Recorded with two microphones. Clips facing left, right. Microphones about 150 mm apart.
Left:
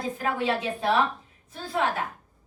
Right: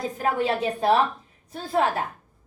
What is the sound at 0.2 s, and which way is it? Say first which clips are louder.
A woman's voice: right 4 dB; 40° right (ahead or behind).